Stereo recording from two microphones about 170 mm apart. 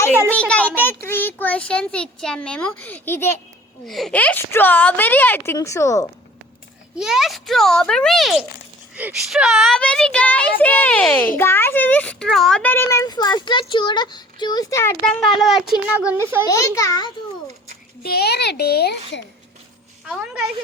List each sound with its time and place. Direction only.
0.3 s a child's voice: 5° left (ahead or behind)
3.8 s a child's voice: centre (ahead or behind); by 6.1 s 20° left (ahead or behind)
6.9 s a child's voice: 5° right (ahead or behind); by 14.9 s 15° left (ahead or behind)
15.0 s speech: centre (ahead or behind)
16.2 s a child's voice: 15° right (ahead or behind)
16.5 s a child's voice: 20° left (ahead or behind)
18.0 s a child's voice: 65° left (ahead or behind)
20.1 s speech: 5° right (ahead or behind)